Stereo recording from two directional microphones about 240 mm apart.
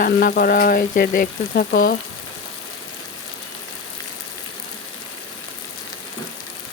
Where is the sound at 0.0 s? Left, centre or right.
Left.